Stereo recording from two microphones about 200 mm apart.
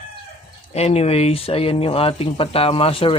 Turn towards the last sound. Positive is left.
turn(degrees=30)  # may be behind; listen again after turning